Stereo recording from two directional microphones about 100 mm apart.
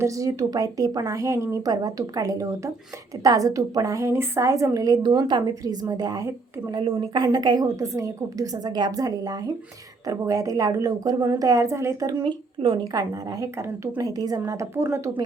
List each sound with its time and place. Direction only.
0.0 s a woman's voice: 35° right (ahead or behind)
6.7 s speech: 60° right (ahead or behind)
7.3 s a woman's voice: 45° right (ahead or behind); by 12.0 s 25° right (ahead or behind)
12.0 s speech: 55° right (ahead or behind)
12.9 s a woman's voice: 40° right (ahead or behind)